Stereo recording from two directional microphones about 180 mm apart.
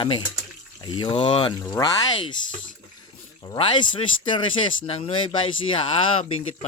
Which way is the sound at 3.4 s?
30° left (ahead or behind).